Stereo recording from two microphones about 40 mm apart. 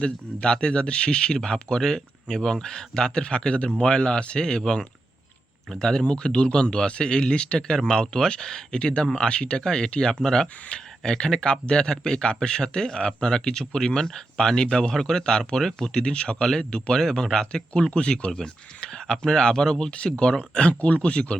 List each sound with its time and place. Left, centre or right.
0.0 s speech: left
15.9 s speech: left